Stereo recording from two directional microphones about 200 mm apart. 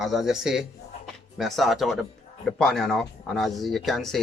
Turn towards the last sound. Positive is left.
turn(degrees=0)  # may be behind; listen again after turning